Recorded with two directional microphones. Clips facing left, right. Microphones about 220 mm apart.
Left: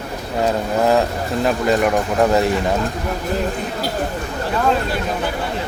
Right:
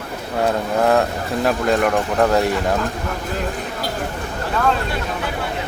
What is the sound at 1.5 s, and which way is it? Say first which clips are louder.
Speech: left 1 dB; centre (ahead or behind).